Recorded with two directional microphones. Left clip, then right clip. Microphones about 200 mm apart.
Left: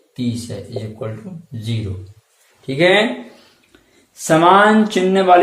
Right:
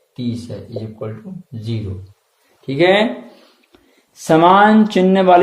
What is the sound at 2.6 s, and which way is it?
Speech, 45° right (ahead or behind).